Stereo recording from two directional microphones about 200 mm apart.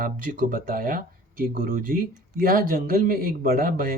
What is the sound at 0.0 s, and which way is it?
Speech, 45° right (ahead or behind).